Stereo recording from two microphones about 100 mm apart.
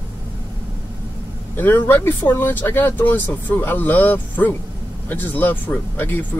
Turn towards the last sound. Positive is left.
turn(degrees=20)  # may be behind; listen again after turning